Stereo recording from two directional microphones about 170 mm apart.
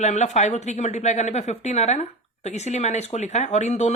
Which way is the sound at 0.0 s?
40° left (ahead or behind).